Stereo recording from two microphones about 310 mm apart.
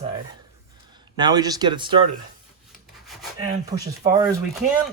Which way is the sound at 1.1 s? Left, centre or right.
Centre.